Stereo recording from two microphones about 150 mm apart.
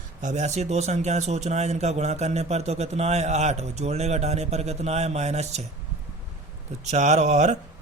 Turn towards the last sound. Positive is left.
turn(degrees=-50)  # may be behind; listen again after turning